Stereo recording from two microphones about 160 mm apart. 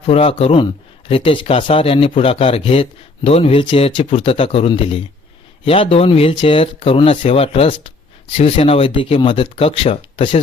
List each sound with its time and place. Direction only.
0.0 s speech: 35° left (ahead or behind)